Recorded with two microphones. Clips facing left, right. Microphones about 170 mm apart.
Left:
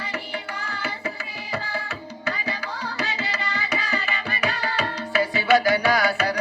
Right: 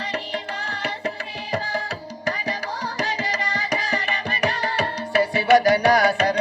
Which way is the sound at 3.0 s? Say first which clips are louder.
Right 3 dB; 40° right (ahead or behind).